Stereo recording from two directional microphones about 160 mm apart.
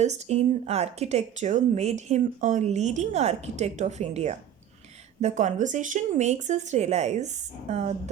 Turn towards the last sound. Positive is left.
turn(degrees=-45)  # may be behind; listen again after turning